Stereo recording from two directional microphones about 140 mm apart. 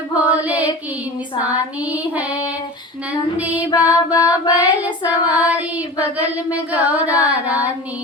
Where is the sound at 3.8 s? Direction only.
20° left (ahead or behind).